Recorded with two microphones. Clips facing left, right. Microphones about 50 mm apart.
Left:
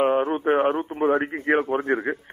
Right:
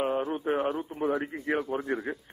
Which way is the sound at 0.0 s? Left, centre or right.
Left.